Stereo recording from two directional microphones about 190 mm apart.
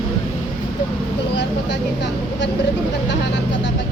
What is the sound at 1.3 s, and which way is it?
Speech, 65° left (ahead or behind).